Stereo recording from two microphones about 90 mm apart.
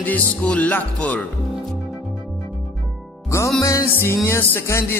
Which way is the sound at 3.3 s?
35° left (ahead or behind).